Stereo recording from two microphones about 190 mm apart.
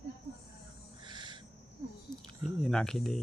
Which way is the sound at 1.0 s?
25° right (ahead or behind).